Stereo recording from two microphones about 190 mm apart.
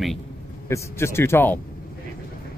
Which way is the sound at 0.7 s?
15° left (ahead or behind).